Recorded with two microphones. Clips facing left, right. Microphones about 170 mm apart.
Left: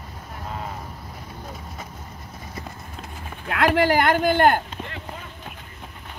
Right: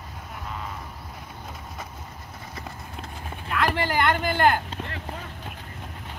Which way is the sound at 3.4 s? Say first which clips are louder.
Left 6 dB; 60° left (ahead or behind).